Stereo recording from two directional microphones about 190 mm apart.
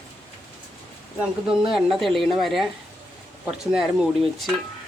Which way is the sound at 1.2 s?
5° right (ahead or behind).